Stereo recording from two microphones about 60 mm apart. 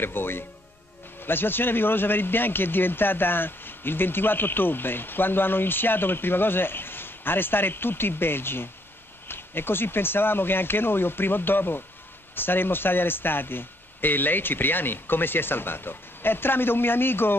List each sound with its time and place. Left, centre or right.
0.0 s a man's voice: left